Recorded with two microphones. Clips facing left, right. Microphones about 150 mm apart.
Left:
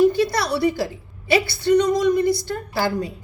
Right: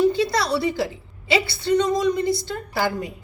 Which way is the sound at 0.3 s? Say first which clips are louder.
Left 1 dB; 25° right (ahead or behind).